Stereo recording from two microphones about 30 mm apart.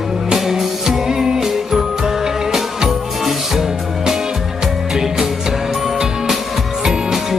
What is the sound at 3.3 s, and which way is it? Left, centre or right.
Music, centre.